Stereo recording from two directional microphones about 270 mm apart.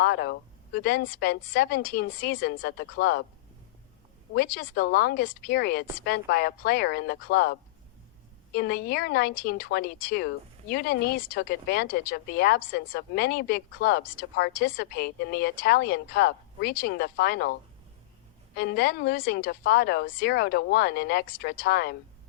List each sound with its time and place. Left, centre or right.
0.0 s a woman's voice: left
4.4 s a woman's voice: left
8.5 s a woman's voice: left
18.5 s a woman's voice: left